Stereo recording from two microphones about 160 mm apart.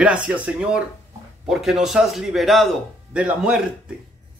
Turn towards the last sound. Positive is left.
turn(degrees=-5)  # may be behind; listen again after turning